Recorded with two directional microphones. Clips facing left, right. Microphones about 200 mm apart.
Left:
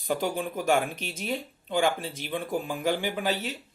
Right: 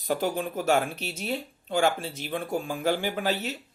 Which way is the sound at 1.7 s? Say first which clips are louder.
Right 1 dB; 15° left (ahead or behind).